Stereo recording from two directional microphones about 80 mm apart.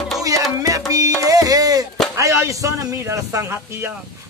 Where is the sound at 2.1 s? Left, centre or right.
Right.